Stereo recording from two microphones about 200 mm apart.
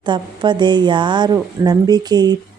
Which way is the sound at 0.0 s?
20° right (ahead or behind).